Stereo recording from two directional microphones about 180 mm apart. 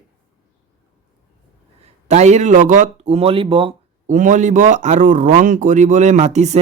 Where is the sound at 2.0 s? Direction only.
40° right (ahead or behind).